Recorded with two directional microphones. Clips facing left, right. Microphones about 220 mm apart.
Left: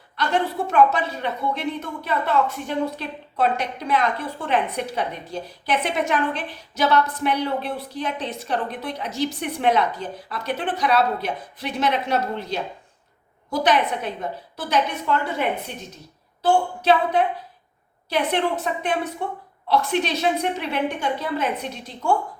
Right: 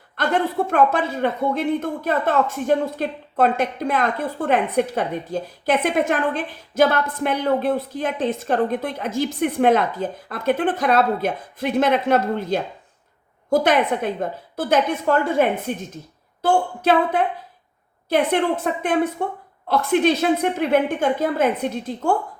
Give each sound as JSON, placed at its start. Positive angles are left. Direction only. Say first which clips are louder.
{"t": 0.7, "sound": "speech", "louder": "left 2 dB", "side_deg": -50}